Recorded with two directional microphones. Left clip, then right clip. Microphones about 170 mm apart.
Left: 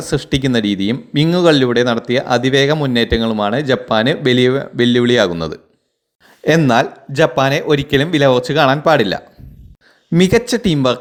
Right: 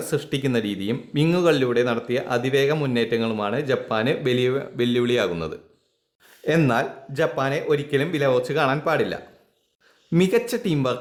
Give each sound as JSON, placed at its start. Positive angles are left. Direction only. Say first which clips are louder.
{"t": 0.0, "sound": "speech", "louder": "left 7 dB", "side_deg": 30}
{"t": 6.7, "sound": "speech", "louder": "left 9 dB", "side_deg": 35}